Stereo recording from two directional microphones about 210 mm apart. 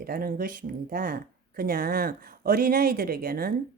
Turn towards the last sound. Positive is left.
turn(degrees=-45)  # may be behind; listen again after turning